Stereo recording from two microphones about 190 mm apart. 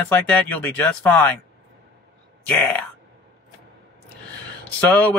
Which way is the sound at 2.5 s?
10° left (ahead or behind).